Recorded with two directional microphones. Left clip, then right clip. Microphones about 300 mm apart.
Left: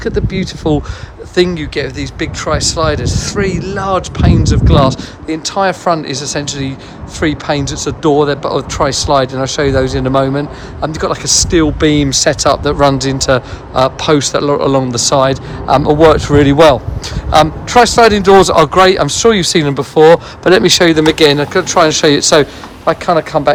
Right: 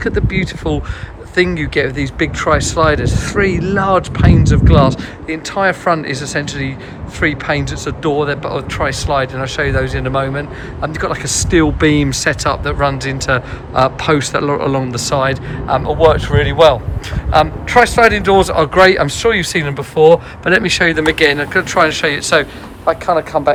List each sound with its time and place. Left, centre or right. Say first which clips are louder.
0.0 s speech: left 1 dB; centre
22.9 s speech: left 2 dB; left